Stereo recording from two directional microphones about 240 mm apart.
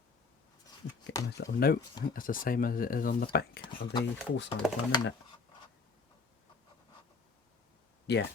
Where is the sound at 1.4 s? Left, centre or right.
Left.